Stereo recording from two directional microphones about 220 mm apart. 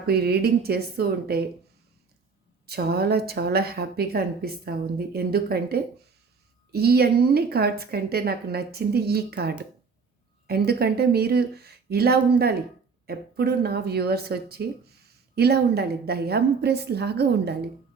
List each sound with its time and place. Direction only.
0.0 s a woman's voice: 45° right (ahead or behind)
2.6 s a woman's voice: 45° right (ahead or behind)